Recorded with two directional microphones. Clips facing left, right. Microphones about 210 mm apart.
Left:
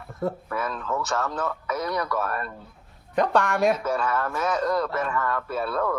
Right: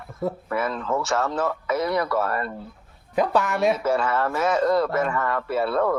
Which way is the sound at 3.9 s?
25° right (ahead or behind).